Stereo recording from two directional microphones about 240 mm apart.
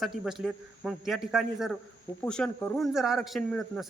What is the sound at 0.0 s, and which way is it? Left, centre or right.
A man's voice, centre.